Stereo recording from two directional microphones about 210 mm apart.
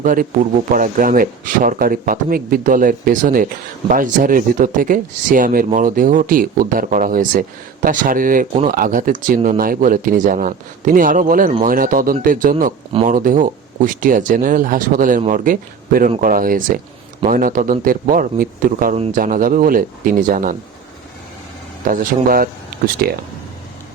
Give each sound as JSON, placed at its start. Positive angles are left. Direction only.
{"t": 0.0, "sound": "speech", "side_deg": -40}
{"t": 21.8, "sound": "speech", "side_deg": -45}